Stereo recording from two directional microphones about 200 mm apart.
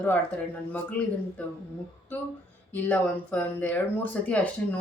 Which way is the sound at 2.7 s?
10° left (ahead or behind).